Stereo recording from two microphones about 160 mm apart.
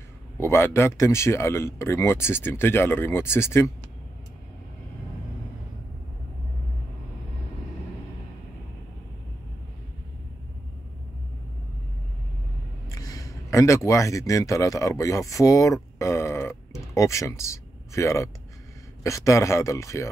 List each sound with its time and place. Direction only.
0.4 s speech: 15° left (ahead or behind)
12.8 s speech: 20° left (ahead or behind)